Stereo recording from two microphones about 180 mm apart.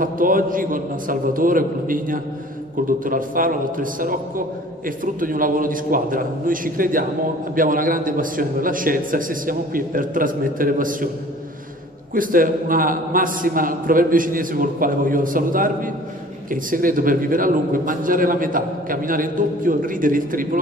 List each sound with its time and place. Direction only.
0.0 s a man's voice: 50° right (ahead or behind)
12.1 s a man's voice: 50° right (ahead or behind)